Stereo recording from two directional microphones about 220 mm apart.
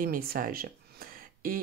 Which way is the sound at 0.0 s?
40° right (ahead or behind).